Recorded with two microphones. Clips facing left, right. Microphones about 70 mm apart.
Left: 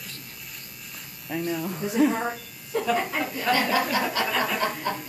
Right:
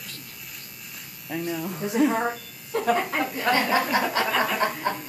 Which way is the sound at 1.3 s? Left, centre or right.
Centre.